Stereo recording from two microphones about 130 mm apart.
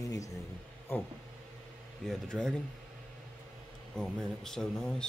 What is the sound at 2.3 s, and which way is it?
Speech, 5° right (ahead or behind).